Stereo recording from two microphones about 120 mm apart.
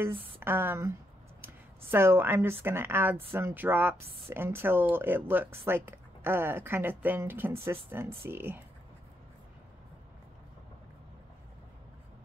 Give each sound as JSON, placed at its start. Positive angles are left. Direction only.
{"t": 0.4, "sound": "a woman's voice", "side_deg": -20}